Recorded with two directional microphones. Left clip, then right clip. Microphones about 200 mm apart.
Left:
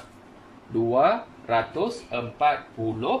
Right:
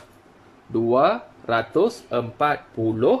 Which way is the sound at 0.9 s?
20° right (ahead or behind).